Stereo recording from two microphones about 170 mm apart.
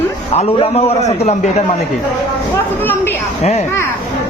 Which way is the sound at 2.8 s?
10° left (ahead or behind).